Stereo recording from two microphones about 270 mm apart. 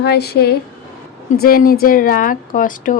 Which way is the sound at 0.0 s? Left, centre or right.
Left.